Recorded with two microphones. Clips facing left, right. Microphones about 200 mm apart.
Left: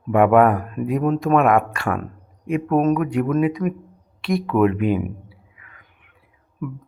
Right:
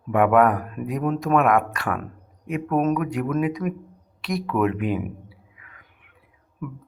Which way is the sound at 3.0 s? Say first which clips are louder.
Left 4 dB; 5° right (ahead or behind).